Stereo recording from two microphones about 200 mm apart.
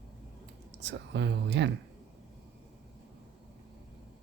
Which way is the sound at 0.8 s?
60° right (ahead or behind).